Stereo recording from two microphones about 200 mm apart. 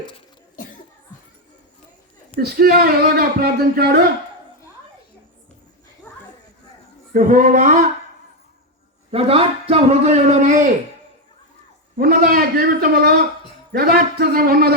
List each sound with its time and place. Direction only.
0.5 s cough: 40° left (ahead or behind)
2.4 s speech: 50° right (ahead or behind)
6.1 s children playing: 10° left (ahead or behind)
7.1 s a sound: 45° right (ahead or behind)
9.1 s a man's voice: 30° right (ahead or behind)
11.9 s speech: 45° right (ahead or behind)